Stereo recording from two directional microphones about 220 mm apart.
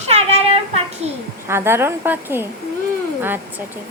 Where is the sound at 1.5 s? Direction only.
10° right (ahead or behind).